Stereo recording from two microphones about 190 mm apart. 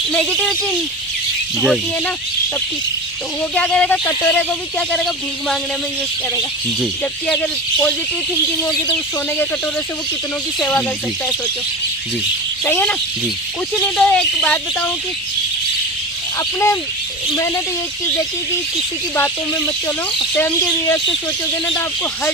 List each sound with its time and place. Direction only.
0.1 s speech: 5° left (ahead or behind)
1.6 s speech: centre (ahead or behind)
3.5 s speech: 5° left (ahead or behind)
7.0 s speech: 5° left (ahead or behind)
10.6 s speech: 10° left (ahead or behind)
12.6 s speech: 10° left (ahead or behind)
16.4 s speech: 15° left (ahead or behind)
19.1 s speech: 15° left (ahead or behind)